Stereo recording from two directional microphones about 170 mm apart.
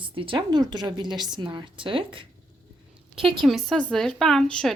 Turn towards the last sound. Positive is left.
turn(degrees=5)  # may be behind; listen again after turning